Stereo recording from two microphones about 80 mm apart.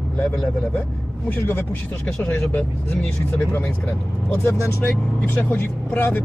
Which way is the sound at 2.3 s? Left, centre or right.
Left.